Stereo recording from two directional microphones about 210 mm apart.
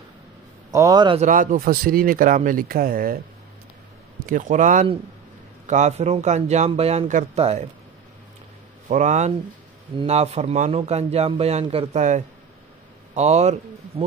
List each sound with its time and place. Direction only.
0.7 s a man's voice: 15° right (ahead or behind)
1.2 s a man's voice: 40° right (ahead or behind)
4.3 s a man's voice: 40° right (ahead or behind)
8.8 s a man's voice: 35° right (ahead or behind)